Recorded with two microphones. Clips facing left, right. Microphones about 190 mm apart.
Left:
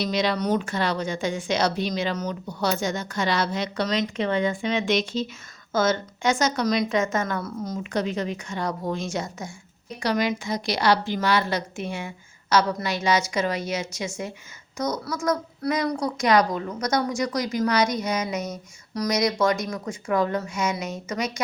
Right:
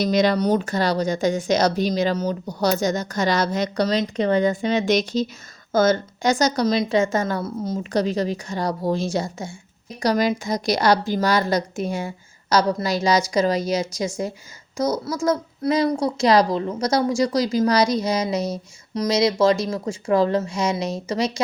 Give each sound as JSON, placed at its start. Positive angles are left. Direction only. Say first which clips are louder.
{"t": 0.0, "sound": "a child's voice", "louder": "right 5 dB", "side_deg": -45}